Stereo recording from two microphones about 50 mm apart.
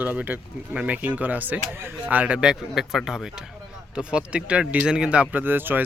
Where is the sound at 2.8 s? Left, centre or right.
Centre.